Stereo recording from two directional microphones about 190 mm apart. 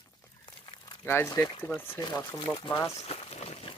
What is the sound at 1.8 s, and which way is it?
Speech, 15° left (ahead or behind).